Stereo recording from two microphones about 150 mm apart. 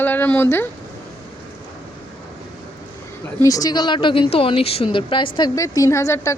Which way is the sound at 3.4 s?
25° left (ahead or behind).